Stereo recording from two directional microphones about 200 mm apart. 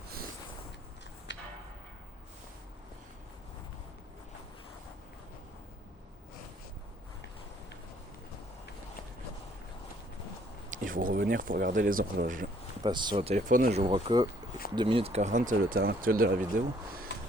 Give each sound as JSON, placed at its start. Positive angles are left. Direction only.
{"t": 1.3, "sound": "a sound", "side_deg": 65}
{"t": 10.7, "sound": "speech", "side_deg": -45}
{"t": 12.8, "sound": "speech", "side_deg": -20}
{"t": 17.1, "sound": "music", "side_deg": 65}